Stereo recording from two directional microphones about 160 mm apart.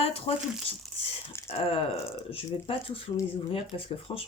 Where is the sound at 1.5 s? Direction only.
35° left (ahead or behind).